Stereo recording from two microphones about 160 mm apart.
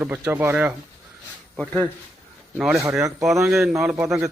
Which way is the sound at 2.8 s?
15° right (ahead or behind).